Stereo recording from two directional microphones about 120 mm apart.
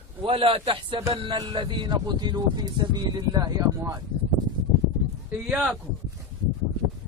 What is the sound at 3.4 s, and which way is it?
Speech, 20° right (ahead or behind).